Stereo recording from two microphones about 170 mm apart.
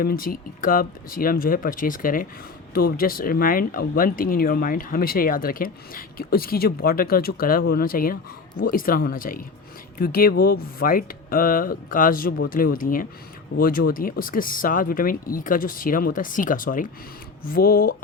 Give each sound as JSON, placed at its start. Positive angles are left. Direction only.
{"t": 0.0, "sound": "speech", "side_deg": 60}